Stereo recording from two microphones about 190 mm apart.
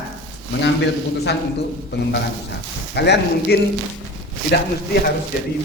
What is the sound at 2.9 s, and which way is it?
Speech, 60° left (ahead or behind).